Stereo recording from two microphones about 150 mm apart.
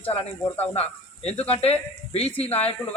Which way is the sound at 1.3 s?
40° left (ahead or behind).